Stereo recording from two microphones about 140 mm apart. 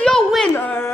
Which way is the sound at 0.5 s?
15° left (ahead or behind).